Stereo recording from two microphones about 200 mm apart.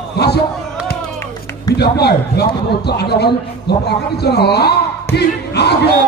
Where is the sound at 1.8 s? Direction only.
55° left (ahead or behind).